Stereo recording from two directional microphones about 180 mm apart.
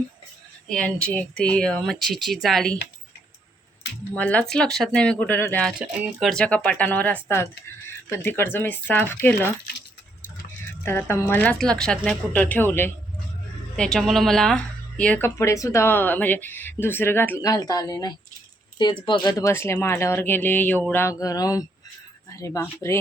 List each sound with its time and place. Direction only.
0.7 s speech: 5° left (ahead or behind)
4.1 s speech: 10° left (ahead or behind)
5.9 s speech: 5° right (ahead or behind)
10.8 s speech: 10° left (ahead or behind)